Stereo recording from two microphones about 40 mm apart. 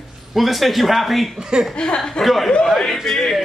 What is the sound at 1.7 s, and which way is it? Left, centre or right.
Speech, left.